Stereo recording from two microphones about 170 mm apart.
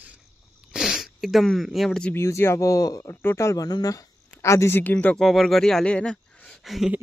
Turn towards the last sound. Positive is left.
turn(degrees=-5)  # may be behind; listen again after turning